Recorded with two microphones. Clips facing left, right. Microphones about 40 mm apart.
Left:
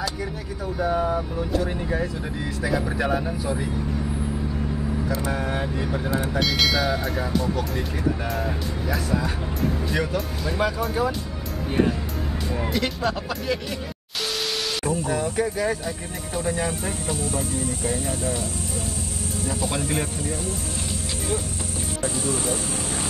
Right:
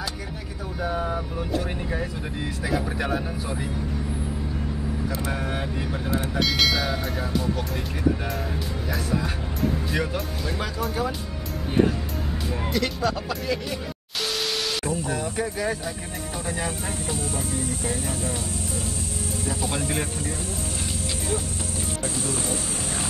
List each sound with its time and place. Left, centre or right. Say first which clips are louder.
0.7 s speech: left 4 dB; centre
5.0 s speech: left 2 dB; centre
12.7 s speech: right 1 dB; centre
14.9 s speech: left 3 dB; centre
19.4 s speech: left 2 dB; centre
22.0 s speech: left 5 dB; centre